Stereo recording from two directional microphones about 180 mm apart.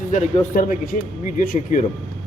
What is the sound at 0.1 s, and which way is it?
Speech, 45° left (ahead or behind).